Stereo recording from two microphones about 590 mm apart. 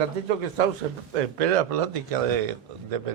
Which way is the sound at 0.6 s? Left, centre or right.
Right.